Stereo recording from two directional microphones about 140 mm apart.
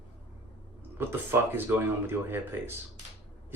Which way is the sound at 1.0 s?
15° right (ahead or behind).